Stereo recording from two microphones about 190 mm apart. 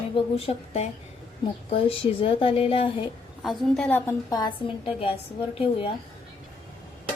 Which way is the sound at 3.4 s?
Centre (ahead or behind).